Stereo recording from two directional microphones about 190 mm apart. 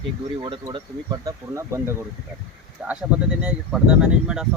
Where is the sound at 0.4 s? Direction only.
25° right (ahead or behind).